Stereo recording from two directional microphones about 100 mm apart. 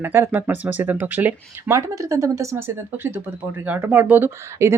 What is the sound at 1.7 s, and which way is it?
Speech, 30° right (ahead or behind).